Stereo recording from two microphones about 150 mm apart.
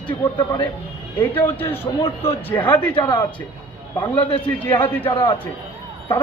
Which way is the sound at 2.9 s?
30° left (ahead or behind).